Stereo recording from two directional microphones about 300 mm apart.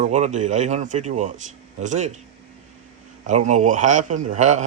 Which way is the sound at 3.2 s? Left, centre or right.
Right.